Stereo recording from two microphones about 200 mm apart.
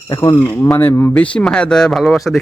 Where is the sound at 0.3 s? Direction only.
5° left (ahead or behind).